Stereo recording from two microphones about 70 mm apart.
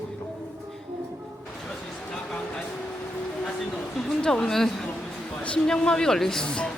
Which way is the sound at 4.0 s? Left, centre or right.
Centre.